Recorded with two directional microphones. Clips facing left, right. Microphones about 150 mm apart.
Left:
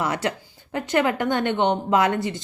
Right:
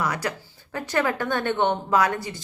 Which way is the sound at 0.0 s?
25° left (ahead or behind).